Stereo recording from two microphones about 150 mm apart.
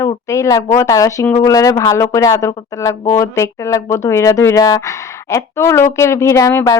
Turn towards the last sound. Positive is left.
turn(degrees=20)  # may be behind; listen again after turning